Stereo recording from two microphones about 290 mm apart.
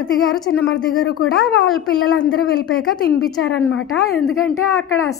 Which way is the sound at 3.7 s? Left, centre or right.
Left.